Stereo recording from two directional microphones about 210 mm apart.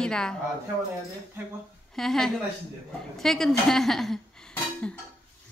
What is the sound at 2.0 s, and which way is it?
A woman's voice, centre (ahead or behind).